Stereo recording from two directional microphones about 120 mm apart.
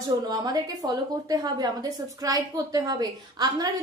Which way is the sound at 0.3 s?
35° right (ahead or behind).